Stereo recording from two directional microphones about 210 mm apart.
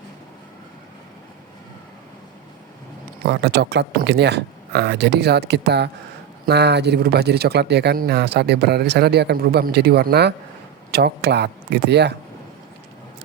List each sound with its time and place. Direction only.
3.2 s speech: 50° right (ahead or behind)